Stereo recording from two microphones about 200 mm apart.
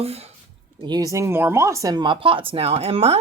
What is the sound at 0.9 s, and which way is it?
Speech, 20° right (ahead or behind).